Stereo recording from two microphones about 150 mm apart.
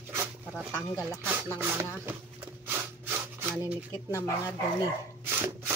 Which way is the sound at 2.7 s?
15° right (ahead or behind).